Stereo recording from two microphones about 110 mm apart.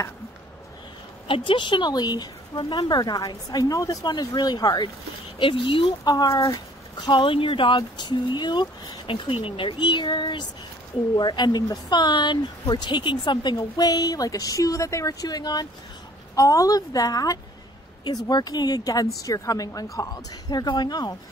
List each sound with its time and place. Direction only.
1.2 s speech: 50° left (ahead or behind)
5.4 s speech: 50° left (ahead or behind)
6.0 s speech: 35° left (ahead or behind)